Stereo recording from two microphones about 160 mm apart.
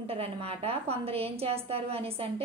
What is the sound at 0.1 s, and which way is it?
A woman's voice, 40° right (ahead or behind).